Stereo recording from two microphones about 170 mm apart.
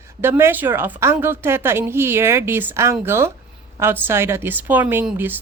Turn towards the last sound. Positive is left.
turn(degrees=-10)  # may be behind; listen again after turning